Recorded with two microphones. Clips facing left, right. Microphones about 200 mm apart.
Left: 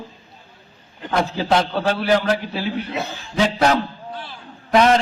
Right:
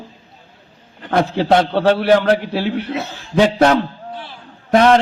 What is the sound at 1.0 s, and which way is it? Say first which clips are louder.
A man's voice: right 5 dB; 60° right (ahead or behind).